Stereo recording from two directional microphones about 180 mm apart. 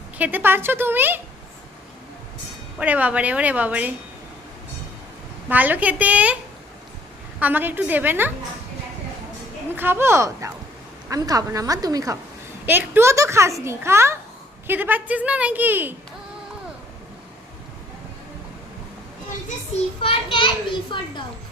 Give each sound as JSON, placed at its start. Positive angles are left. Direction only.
{"t": 0.2, "sound": "a child's voice", "side_deg": -10}
{"t": 2.7, "sound": "a child's voice", "side_deg": -10}
{"t": 5.5, "sound": "a child's voice", "side_deg": -10}
{"t": 7.3, "sound": "a child's voice", "side_deg": -10}
{"t": 9.7, "sound": "a child's voice", "side_deg": -10}
{"t": 20.0, "sound": "a child's voice", "side_deg": 30}